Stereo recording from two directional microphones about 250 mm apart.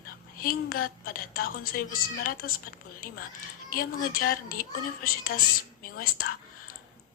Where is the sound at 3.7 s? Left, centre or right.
Left.